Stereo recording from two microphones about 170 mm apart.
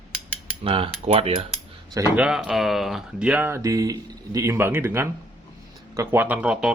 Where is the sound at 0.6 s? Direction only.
35° right (ahead or behind).